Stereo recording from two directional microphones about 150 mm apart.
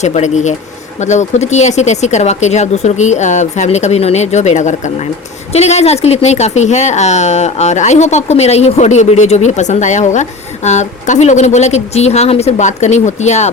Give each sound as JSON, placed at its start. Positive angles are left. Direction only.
{"t": 0.0, "sound": "a woman's voice", "side_deg": 50}